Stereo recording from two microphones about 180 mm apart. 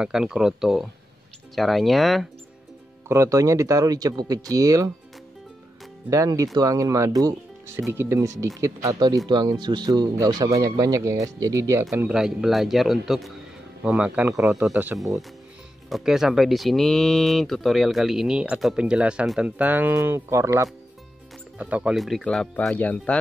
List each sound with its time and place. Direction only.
0.0 s speech: 5° right (ahead or behind)
3.1 s speech: 15° right (ahead or behind)
6.0 s speech: 15° right (ahead or behind)
12.1 s speech: 5° right (ahead or behind)
15.9 s speech: centre (ahead or behind)